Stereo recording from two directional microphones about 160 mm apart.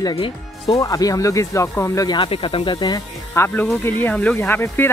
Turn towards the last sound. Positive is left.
turn(degrees=15)  # may be behind; listen again after turning